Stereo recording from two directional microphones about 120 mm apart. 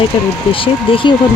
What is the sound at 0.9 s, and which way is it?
Speech, 45° left (ahead or behind).